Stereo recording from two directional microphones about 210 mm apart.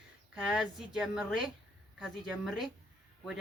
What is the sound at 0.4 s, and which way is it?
Speech, 5° right (ahead or behind).